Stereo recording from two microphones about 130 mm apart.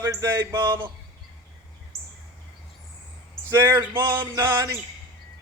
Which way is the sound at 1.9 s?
25° left (ahead or behind).